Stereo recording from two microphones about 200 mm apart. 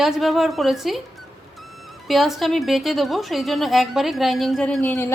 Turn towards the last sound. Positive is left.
turn(degrees=5)  # may be behind; listen again after turning